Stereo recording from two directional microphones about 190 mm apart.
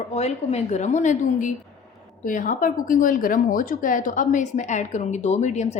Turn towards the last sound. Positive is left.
turn(degrees=35)  # may be behind; listen again after turning